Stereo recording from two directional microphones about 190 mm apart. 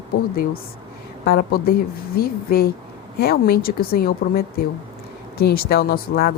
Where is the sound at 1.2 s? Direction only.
55° left (ahead or behind).